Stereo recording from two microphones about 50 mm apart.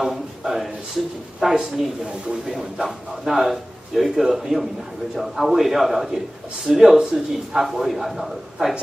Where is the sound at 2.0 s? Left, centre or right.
Centre.